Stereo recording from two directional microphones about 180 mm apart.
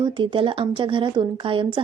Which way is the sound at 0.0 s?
25° right (ahead or behind).